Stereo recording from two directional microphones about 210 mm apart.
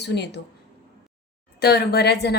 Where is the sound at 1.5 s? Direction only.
50° left (ahead or behind).